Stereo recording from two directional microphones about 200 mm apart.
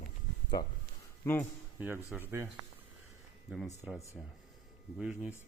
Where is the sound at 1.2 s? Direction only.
10° left (ahead or behind).